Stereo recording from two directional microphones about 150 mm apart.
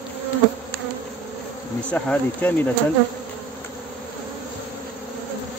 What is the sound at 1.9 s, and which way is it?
Speech, 10° left (ahead or behind).